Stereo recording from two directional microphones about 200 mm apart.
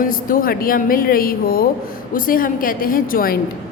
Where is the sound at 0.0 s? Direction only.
45° left (ahead or behind).